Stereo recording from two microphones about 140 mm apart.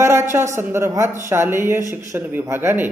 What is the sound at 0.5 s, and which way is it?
A man's voice, 20° right (ahead or behind).